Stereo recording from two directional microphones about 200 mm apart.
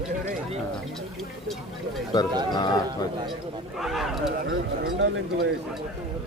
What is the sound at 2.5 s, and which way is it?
Speech, 20° left (ahead or behind).